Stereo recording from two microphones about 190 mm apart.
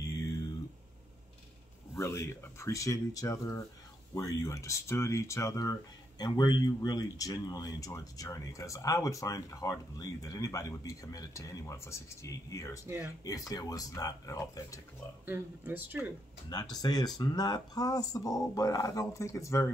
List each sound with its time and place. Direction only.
2.0 s speech: 15° left (ahead or behind)
12.8 s speech: 15° right (ahead or behind)
13.2 s speech: 20° left (ahead or behind)
15.2 s speech: 10° right (ahead or behind)
16.0 s speech: 20° left (ahead or behind)